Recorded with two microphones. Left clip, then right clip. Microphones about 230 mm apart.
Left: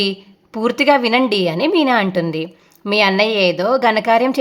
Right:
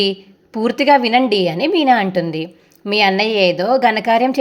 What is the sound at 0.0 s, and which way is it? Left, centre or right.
A woman's voice, centre.